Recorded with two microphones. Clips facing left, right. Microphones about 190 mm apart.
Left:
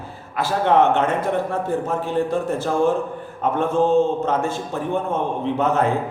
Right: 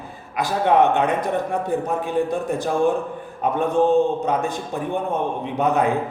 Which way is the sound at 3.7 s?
15° right (ahead or behind).